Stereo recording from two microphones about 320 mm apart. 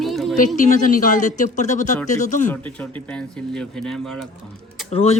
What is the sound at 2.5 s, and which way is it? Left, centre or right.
Speech, centre.